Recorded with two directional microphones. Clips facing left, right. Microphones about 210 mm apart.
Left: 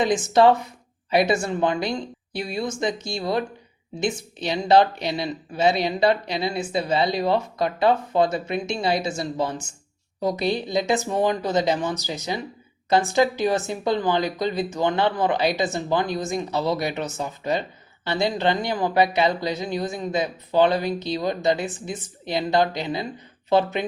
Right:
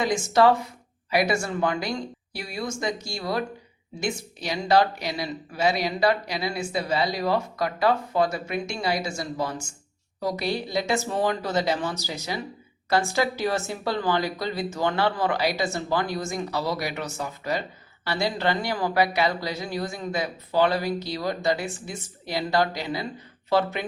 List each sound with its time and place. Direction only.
0.0 s speech: 20° left (ahead or behind)